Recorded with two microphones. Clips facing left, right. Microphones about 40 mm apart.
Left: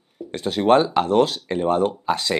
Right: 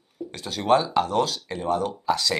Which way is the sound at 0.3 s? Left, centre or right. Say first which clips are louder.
Left 4 dB; left.